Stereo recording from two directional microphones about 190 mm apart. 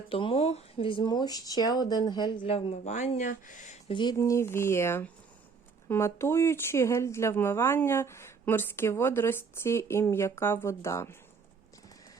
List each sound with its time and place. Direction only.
0.1 s speech: 30° left (ahead or behind)
3.9 s speech: 20° left (ahead or behind)